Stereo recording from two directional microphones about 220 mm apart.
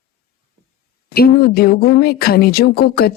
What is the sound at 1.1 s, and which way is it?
Speech, 45° left (ahead or behind).